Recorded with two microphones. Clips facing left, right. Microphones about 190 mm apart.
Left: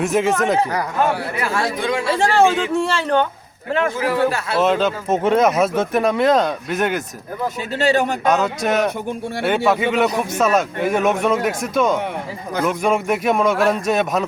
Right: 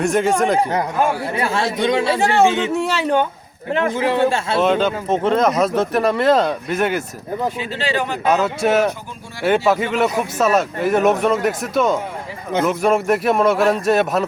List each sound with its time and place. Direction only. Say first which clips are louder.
0.0 s speech: right 1 dB; centre (ahead or behind)
1.4 s a man's voice: right 2 dB; 25° right (ahead or behind)
2.7 s speech: even; 5° right (ahead or behind)
3.7 s a man's voice: right 1 dB; 20° right (ahead or behind)
4.6 s speech: left 1 dB; centre (ahead or behind)
7.8 s speech: left 6 dB; 45° left (ahead or behind)
8.2 s speech: right 1 dB; 5° right (ahead or behind)